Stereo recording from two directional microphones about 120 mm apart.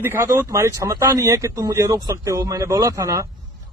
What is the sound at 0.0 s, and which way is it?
Speech, 20° right (ahead or behind).